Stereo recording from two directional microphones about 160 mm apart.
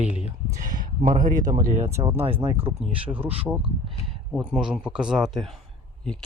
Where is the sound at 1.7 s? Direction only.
45° right (ahead or behind).